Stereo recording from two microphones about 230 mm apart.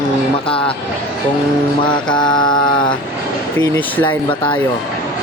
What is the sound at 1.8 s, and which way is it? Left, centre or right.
Mantra, centre.